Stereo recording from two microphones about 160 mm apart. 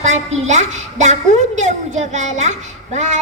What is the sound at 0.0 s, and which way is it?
A woman's voice, 45° right (ahead or behind).